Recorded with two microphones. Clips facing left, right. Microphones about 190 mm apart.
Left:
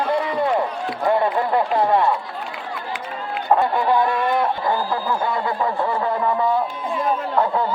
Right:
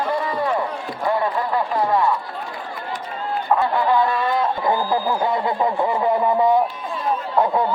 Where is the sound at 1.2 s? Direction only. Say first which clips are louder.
Left 2 dB; 25° left (ahead or behind).